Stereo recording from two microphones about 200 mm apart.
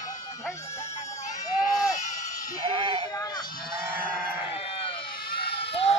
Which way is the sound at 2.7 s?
25° right (ahead or behind).